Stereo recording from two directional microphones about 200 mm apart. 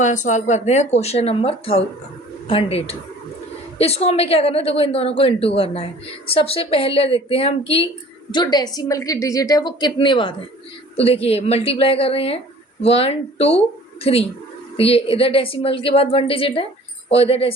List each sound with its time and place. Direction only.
0.0 s a woman's voice: 40° left (ahead or behind)